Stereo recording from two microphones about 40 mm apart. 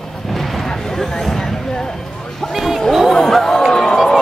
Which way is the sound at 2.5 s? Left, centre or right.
Centre.